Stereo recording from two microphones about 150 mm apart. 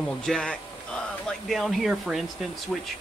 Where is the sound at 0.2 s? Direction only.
5° left (ahead or behind).